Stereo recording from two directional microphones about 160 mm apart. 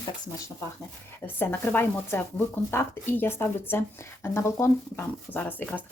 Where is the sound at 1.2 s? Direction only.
15° left (ahead or behind).